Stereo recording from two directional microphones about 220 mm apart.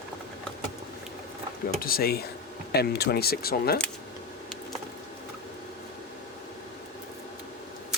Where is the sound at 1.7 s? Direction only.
40° left (ahead or behind).